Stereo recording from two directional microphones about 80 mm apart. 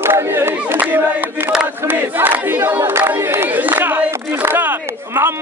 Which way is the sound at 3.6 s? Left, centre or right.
Right.